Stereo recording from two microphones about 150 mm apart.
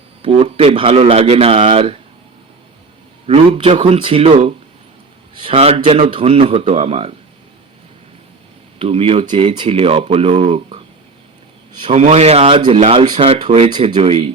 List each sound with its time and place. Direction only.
0.2 s a man's voice: 40° right (ahead or behind)
3.2 s a man's voice: 40° right (ahead or behind)
8.8 s a man's voice: 40° right (ahead or behind)
13.7 s a man's voice: 30° right (ahead or behind)